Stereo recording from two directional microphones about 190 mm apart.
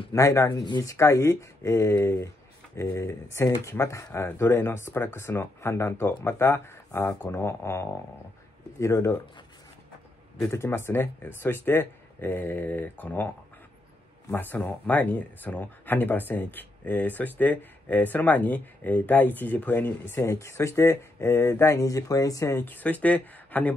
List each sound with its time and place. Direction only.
0.1 s speech: 15° left (ahead or behind)
10.5 s speech: 15° left (ahead or behind)